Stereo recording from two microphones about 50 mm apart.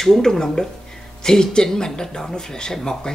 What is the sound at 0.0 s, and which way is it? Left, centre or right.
Speech, centre.